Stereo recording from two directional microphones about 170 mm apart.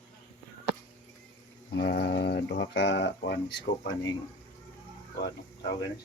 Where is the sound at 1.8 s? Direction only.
70° left (ahead or behind); by 3.6 s 90° left.